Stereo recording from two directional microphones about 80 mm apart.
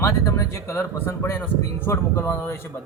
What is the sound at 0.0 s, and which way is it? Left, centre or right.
Speech, left.